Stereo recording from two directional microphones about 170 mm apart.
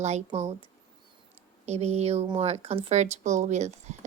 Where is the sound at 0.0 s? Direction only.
40° right (ahead or behind).